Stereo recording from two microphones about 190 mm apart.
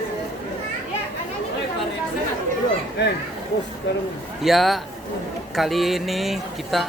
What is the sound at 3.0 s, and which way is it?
Speech, 65° left (ahead or behind).